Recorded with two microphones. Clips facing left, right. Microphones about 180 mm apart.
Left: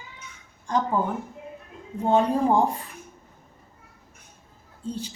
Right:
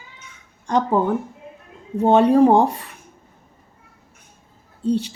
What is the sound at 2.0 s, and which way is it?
Speech, 75° right (ahead or behind).